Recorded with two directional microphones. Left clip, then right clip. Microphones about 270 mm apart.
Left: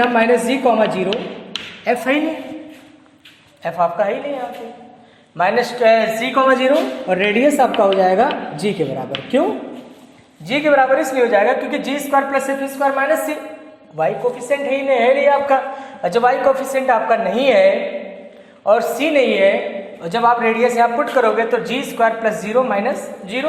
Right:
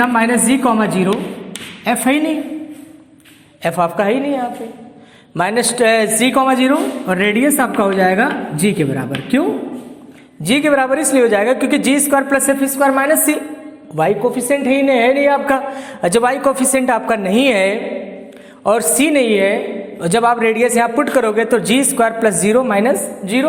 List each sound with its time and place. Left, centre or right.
0.3 s a woman's voice: right
3.6 s a woman's voice: right
5.4 s a woman's voice: right
10.4 s a woman's voice: right